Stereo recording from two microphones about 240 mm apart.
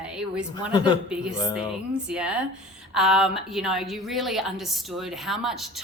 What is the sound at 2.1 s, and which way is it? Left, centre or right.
A woman's voice, centre.